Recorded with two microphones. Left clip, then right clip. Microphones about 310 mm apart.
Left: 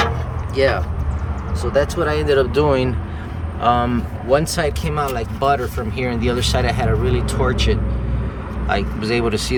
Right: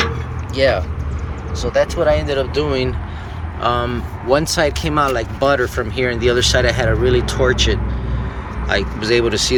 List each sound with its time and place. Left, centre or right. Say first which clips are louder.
0.5 s speech: right 2 dB; centre